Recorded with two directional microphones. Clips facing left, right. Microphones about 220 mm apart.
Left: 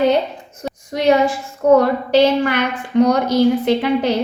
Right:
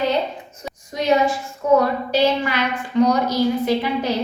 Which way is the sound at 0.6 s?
65° left (ahead or behind).